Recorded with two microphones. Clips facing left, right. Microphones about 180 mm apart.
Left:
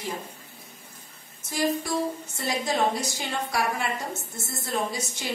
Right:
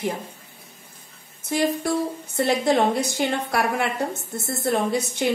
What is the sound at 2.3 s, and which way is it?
A woman's voice, 60° right (ahead or behind).